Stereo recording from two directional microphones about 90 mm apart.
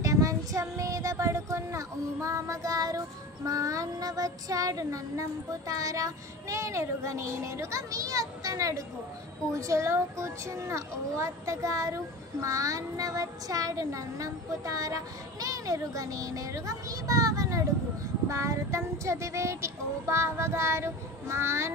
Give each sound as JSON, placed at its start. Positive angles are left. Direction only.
{"t": 0.0, "sound": "child singing", "side_deg": -35}
{"t": 3.4, "sound": "speech", "side_deg": -40}